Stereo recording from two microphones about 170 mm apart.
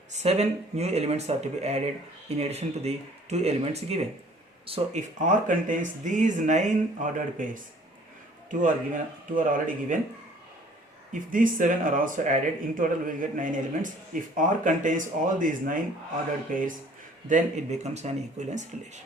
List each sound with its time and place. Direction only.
0.1 s speech: 40° right (ahead or behind)
5.2 s speech: 50° right (ahead or behind)
9.3 s speech: 50° right (ahead or behind)
11.1 s speech: 50° right (ahead or behind)